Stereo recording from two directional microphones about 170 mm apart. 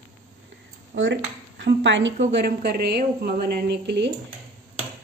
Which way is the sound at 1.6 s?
90° right.